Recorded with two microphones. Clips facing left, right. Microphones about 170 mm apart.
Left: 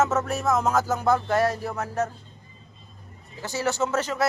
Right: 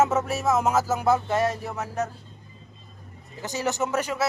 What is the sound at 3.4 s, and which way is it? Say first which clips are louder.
Speech: left 1 dB; 15° right (ahead or behind).